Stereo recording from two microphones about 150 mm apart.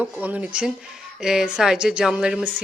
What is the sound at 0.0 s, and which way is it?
Speech, 10° right (ahead or behind).